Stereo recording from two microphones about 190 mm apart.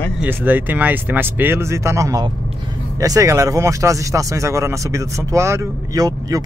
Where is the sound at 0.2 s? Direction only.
10° right (ahead or behind).